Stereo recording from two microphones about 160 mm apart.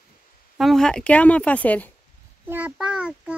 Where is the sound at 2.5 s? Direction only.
10° right (ahead or behind).